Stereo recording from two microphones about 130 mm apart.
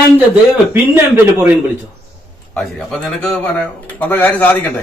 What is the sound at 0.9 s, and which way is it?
Speech, 15° right (ahead or behind).